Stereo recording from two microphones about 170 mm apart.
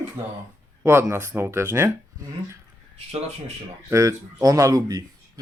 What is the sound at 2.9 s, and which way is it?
Speech, 40° right (ahead or behind).